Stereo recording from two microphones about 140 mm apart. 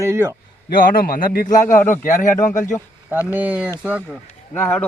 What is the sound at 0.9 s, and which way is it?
Speech, 90° left.